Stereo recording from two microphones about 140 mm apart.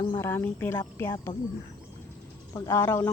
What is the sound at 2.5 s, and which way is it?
Speech, 15° left (ahead or behind).